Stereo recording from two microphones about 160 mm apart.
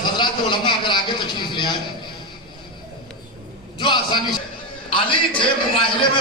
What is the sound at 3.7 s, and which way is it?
A man's voice, 30° left (ahead or behind).